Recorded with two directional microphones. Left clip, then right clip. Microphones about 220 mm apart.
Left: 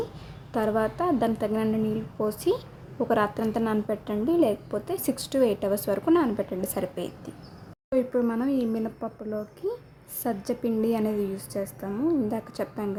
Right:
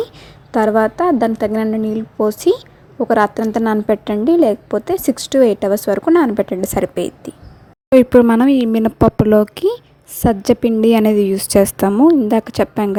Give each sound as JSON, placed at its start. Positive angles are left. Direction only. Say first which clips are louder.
{"t": 0.5, "sound": "a woman's voice", "louder": "right 12 dB", "side_deg": -30}